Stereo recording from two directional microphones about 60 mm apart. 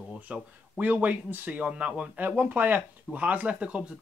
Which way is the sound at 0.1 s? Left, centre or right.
Right.